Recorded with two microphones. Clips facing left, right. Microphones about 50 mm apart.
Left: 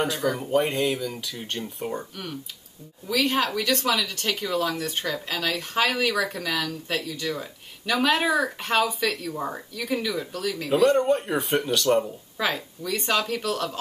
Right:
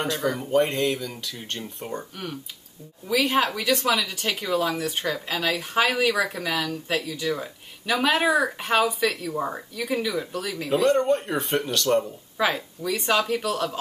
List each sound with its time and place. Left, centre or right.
0.0 s speech: centre